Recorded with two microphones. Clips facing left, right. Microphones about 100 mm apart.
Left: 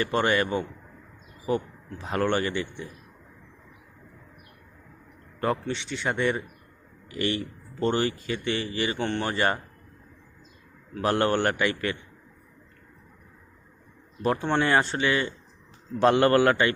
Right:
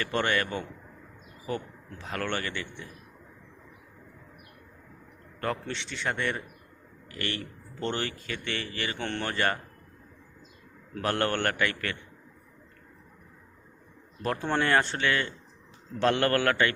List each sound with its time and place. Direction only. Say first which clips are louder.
0.0 s speech: left 4 dB; 15° left (ahead or behind)
2.0 s speech: left 7 dB; 20° left (ahead or behind)
5.4 s a man's voice: left 5 dB; 15° left (ahead or behind)
5.7 s speech: left 3 dB; 5° left (ahead or behind)
9.0 s speech: left 5 dB; 5° left (ahead or behind)
9.3 s speech: left 1 dB; 20° left (ahead or behind)
10.9 s speech: left 4 dB; 15° left (ahead or behind)
14.2 s speech: left 4 dB; 5° left (ahead or behind)